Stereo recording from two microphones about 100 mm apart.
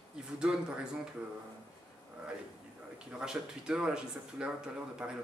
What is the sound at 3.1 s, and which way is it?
Speech, 10° right (ahead or behind).